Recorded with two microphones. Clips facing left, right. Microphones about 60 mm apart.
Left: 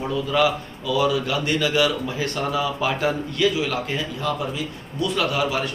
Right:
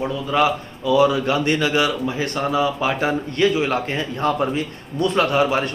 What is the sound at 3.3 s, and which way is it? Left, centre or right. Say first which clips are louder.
Speech: right 5 dB; right.